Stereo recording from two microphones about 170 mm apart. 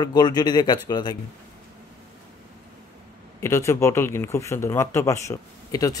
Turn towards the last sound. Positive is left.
turn(degrees=20)  # may be behind; listen again after turning